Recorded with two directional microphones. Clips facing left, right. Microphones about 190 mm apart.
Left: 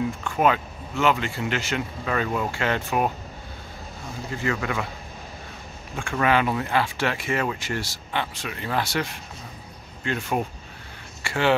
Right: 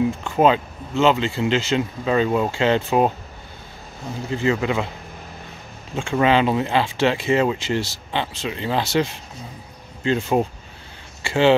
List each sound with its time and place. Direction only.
0.2 s speech: 25° right (ahead or behind)
4.3 s speech: 25° right (ahead or behind)
5.9 s speech: 25° right (ahead or behind)